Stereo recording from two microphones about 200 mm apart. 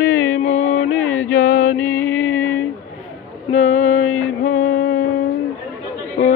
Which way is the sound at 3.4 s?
35° left (ahead or behind).